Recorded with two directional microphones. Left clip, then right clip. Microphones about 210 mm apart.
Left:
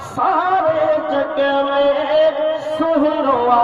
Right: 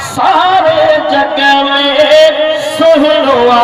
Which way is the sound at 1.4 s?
45° right (ahead or behind).